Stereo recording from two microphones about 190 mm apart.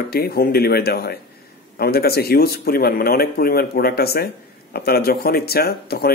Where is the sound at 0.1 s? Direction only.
55° left (ahead or behind).